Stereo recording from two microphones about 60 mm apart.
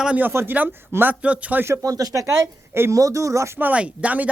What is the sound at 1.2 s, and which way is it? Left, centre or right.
Speech, right.